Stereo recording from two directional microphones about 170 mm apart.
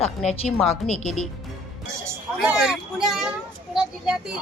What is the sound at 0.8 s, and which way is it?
Speech, 40° left (ahead or behind).